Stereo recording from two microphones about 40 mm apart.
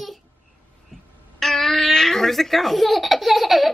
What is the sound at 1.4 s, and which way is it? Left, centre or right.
Baby laughter, centre.